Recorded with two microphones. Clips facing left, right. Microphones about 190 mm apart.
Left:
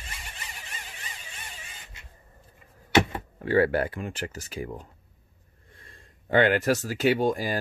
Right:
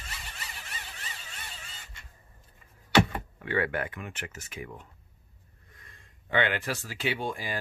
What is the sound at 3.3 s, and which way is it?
Speech, 35° left (ahead or behind).